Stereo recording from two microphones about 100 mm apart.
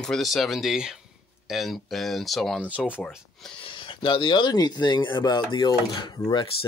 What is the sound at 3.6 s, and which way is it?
Speech, 55° left (ahead or behind).